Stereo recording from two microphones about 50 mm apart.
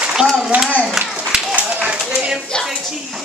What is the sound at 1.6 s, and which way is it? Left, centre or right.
Clapping, right.